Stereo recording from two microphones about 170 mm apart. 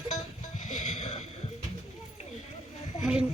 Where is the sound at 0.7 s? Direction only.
45° left (ahead or behind).